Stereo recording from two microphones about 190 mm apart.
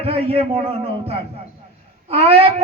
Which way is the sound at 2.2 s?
30° right (ahead or behind).